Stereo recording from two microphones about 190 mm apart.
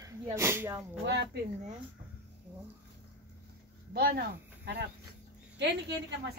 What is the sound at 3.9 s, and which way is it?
A woman's voice, 55° right (ahead or behind).